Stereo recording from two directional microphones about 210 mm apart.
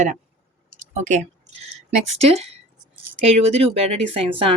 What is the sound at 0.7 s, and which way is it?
Clicking, 35° right (ahead or behind).